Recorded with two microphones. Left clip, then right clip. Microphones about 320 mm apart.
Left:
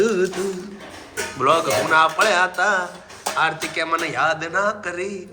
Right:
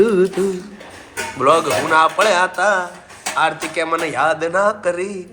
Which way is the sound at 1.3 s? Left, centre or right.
Centre.